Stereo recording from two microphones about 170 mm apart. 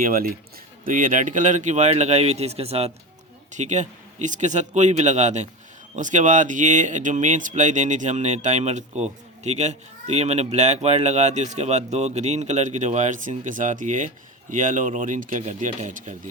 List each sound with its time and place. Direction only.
0.0 s speech: 60° right (ahead or behind)